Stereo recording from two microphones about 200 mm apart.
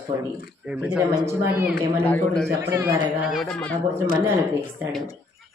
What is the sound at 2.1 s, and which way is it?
Speech, 5° left (ahead or behind).